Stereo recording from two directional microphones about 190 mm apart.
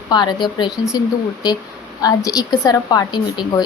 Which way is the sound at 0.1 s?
25° left (ahead or behind).